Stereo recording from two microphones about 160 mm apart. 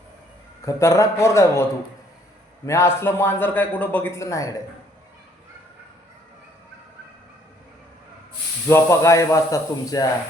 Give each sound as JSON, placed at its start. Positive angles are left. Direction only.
{"t": 0.6, "sound": "a man's voice", "side_deg": 20}
{"t": 2.6, "sound": "a man's voice", "side_deg": 15}
{"t": 8.6, "sound": "speech", "side_deg": 15}